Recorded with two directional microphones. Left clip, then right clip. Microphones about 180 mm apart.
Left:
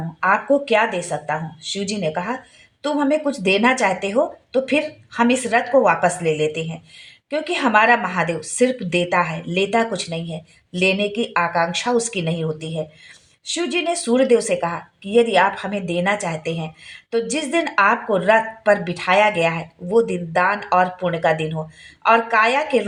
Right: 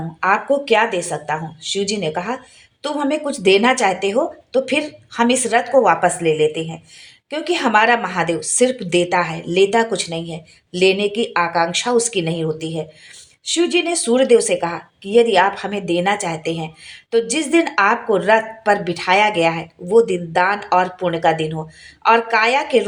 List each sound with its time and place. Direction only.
0.2 s a woman's voice: 30° right (ahead or behind)